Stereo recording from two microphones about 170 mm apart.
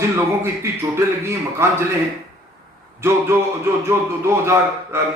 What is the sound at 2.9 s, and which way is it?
Speech, 15° right (ahead or behind).